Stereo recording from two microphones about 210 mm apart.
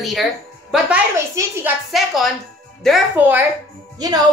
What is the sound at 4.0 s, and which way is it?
Speech, 20° right (ahead or behind).